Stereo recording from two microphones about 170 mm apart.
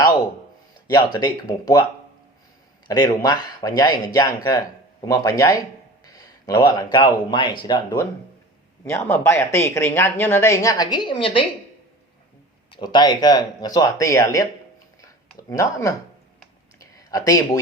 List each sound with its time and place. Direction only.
0.9 s speech: 25° left (ahead or behind)
2.8 s speech: 25° left (ahead or behind)
8.8 s speech: 15° left (ahead or behind); by 11.4 s 30° left (ahead or behind)
12.7 s speech: 25° left (ahead or behind)
15.0 s a sound: 20° left (ahead or behind)